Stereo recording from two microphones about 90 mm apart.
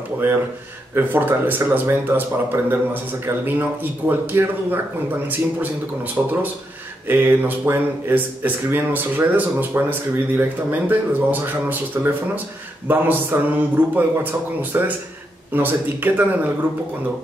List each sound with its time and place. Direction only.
0.9 s speech: 25° right (ahead or behind)
6.2 s speech: 15° right (ahead or behind)
7.1 s speech: 25° right (ahead or behind)